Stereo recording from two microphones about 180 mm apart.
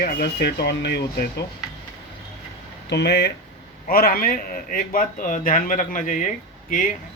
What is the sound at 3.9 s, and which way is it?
A man's voice, 55° left (ahead or behind).